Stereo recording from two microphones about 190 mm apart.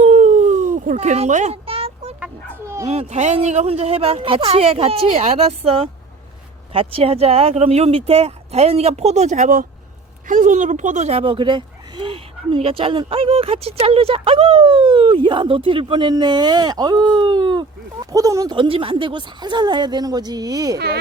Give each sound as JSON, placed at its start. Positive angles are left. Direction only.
{"t": 0.0, "sound": "a sound", "side_deg": -40}
{"t": 2.2, "sound": "bow-wow", "side_deg": -15}
{"t": 2.8, "sound": "speech", "side_deg": -35}
{"t": 20.7, "sound": "speech", "side_deg": -60}